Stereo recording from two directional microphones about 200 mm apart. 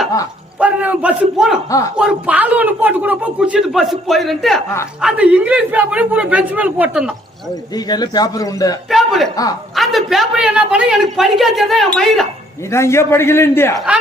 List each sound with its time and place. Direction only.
0.6 s a man's voice: 5° right (ahead or behind)
7.9 s a man's voice: 20° left (ahead or behind)
8.9 s a man's voice: centre (ahead or behind)
12.7 s a man's voice: 15° left (ahead or behind)